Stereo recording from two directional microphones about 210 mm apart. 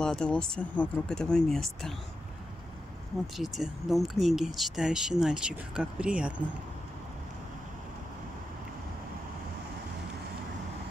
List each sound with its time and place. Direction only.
0.0 s speech: 5° left (ahead or behind)
3.3 s speech: centre (ahead or behind)